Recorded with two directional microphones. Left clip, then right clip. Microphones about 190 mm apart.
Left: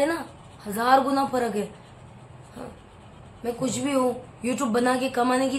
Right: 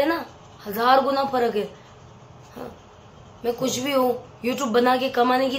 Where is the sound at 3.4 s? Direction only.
Centre (ahead or behind).